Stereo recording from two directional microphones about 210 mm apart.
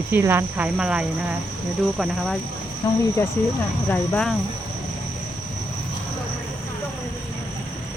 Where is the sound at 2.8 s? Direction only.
15° left (ahead or behind).